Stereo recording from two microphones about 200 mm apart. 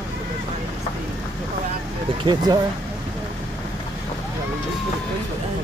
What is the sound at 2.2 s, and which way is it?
Speech, 20° right (ahead or behind).